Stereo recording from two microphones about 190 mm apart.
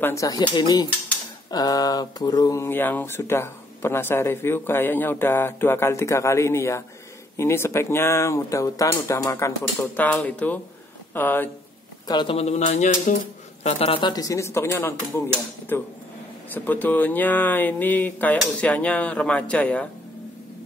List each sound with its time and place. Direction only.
0.0 s speech: 15° left (ahead or behind)
12.1 s speech: 25° left (ahead or behind); by 19.9 s 5° left (ahead or behind)